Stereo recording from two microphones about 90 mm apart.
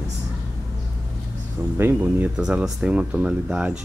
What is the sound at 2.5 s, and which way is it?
Speech, 10° right (ahead or behind).